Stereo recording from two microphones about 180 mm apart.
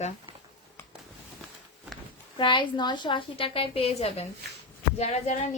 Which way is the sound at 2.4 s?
25° left (ahead or behind).